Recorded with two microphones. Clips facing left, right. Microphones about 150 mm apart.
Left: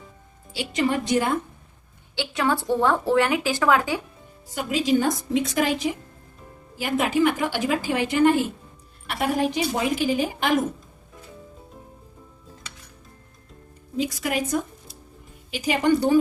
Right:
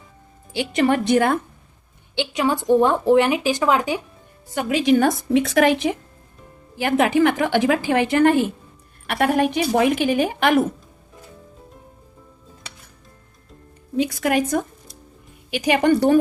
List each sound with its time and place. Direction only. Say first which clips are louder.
0.5 s a woman's voice: right 5 dB; 60° right (ahead or behind)
2.1 s a woman's voice: right 3 dB; 15° right (ahead or behind)
4.5 s a woman's voice: right 4 dB; 65° right (ahead or behind)
13.9 s a woman's voice: right 6 dB; 65° right (ahead or behind)
15.4 s a woman's voice: right 4 dB; 70° right (ahead or behind)